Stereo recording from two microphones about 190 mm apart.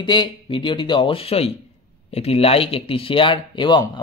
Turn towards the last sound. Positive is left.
turn(degrees=25)  # may be behind; listen again after turning